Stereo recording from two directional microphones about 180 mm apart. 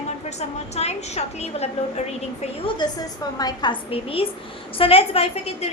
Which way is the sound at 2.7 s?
20° left (ahead or behind).